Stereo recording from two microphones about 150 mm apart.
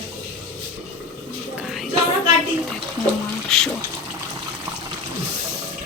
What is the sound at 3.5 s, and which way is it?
Speech, 5° left (ahead or behind).